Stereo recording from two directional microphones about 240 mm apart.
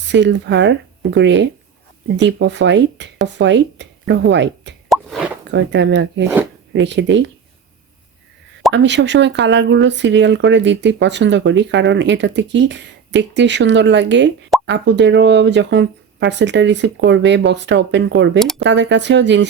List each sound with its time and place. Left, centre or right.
0.1 s speech: right
8.7 s speech: right